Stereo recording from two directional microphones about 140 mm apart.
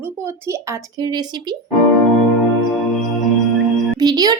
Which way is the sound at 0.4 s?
25° right (ahead or behind).